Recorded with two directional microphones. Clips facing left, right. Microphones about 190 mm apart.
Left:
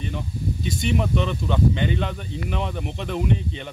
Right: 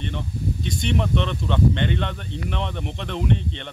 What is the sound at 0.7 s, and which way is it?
Speech, 5° left (ahead or behind).